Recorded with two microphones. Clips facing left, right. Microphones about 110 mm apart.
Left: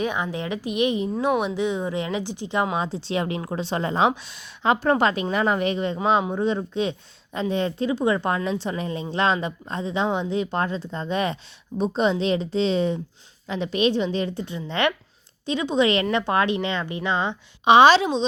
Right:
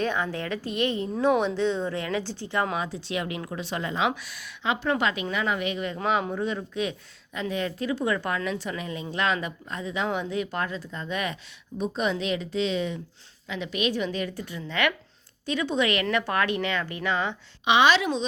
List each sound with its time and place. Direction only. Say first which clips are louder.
0.0 s speech: left 1 dB; 15° left (ahead or behind)
2.7 s a woman's voice: left 4 dB; 30° left (ahead or behind)
4.6 s a woman's voice: left 6 dB; 40° left (ahead or behind); by 17.3 s 20° left (ahead or behind)
17.7 s a woman's voice: left 6 dB; 35° left (ahead or behind)